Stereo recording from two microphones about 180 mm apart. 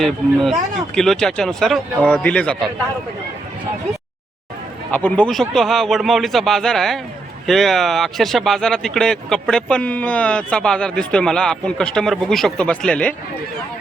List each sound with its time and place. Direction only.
0.0 s speech: centre (ahead or behind)
4.9 s speech: 10° left (ahead or behind)